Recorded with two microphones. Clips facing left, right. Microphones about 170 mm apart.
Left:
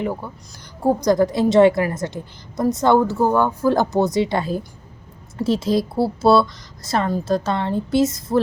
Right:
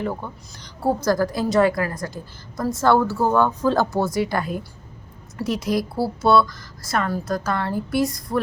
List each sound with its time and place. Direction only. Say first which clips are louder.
0.0 s a woman's voice: left 2 dB; 10° left (ahead or behind)